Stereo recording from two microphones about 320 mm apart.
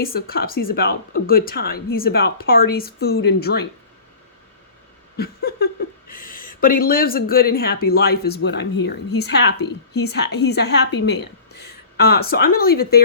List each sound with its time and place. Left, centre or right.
0.0 s speech: left
5.1 s a woman's voice: left